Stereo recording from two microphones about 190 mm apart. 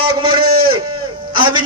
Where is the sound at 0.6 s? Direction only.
25° right (ahead or behind).